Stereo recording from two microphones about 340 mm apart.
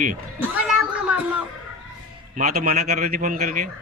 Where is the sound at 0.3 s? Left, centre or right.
Centre.